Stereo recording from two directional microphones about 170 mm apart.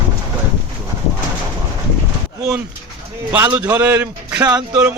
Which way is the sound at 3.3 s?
15° right (ahead or behind).